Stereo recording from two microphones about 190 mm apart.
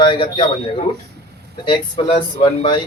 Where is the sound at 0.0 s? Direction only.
25° left (ahead or behind).